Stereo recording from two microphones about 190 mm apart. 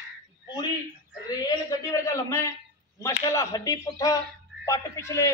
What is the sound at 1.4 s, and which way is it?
A man's voice, 15° left (ahead or behind).